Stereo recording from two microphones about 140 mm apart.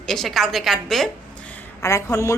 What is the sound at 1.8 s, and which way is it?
Speech, 20° left (ahead or behind).